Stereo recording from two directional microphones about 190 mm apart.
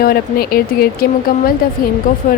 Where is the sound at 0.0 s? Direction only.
50° left (ahead or behind).